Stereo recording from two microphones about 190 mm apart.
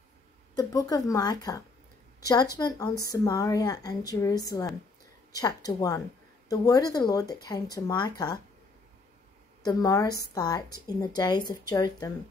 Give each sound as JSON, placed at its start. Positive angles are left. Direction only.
{"t": 0.6, "sound": "speech", "side_deg": 20}
{"t": 2.1, "sound": "a sound", "side_deg": 20}
{"t": 2.5, "sound": "speech", "side_deg": 20}
{"t": 9.7, "sound": "speech", "side_deg": 20}